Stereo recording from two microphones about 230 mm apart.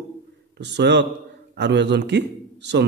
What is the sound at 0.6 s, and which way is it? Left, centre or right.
A man's voice, right.